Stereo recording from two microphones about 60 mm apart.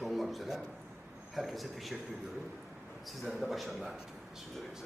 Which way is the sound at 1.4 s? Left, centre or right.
Centre.